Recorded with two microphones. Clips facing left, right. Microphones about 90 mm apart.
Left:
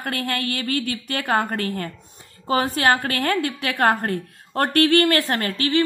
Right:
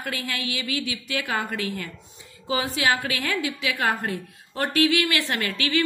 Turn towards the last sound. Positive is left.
turn(degrees=35)  # may be behind; listen again after turning